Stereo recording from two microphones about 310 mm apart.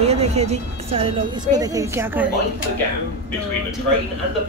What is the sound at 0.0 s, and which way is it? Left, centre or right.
Speech, centre.